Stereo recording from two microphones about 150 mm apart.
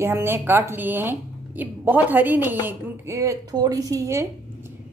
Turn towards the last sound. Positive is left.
turn(degrees=-20)  # may be behind; listen again after turning